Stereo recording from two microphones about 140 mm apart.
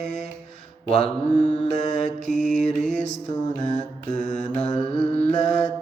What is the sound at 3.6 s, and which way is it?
Mantra, 60° left (ahead or behind).